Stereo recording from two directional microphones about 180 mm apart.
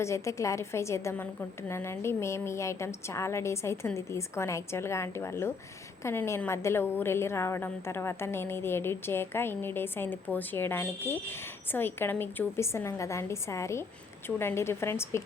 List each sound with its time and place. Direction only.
0.0 s a woman's voice: 15° left (ahead or behind)